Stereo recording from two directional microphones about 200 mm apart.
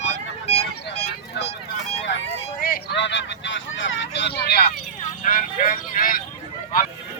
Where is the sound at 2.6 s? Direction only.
55° left (ahead or behind).